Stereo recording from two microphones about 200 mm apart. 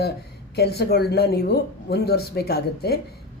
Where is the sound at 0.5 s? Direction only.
55° left (ahead or behind).